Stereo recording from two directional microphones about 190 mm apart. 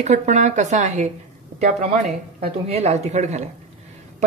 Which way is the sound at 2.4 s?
35° right (ahead or behind).